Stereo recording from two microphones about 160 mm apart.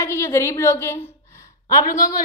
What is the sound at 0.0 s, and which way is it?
A woman's voice, 15° left (ahead or behind).